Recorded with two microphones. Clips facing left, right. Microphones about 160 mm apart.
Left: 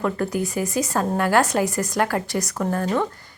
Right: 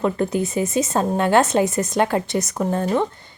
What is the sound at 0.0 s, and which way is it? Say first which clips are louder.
Speech: right 3 dB; 20° right (ahead or behind).